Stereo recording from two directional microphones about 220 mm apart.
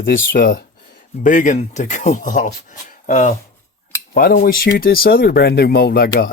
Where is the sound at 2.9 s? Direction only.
35° left (ahead or behind).